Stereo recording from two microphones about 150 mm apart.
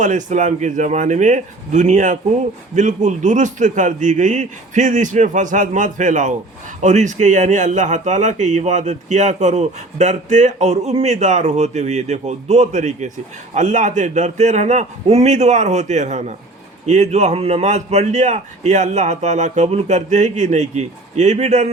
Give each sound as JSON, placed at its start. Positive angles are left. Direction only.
{"t": 0.0, "sound": "a man's voice", "side_deg": -55}